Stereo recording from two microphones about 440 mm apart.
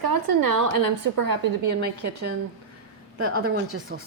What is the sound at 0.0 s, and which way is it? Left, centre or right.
A woman's voice, right.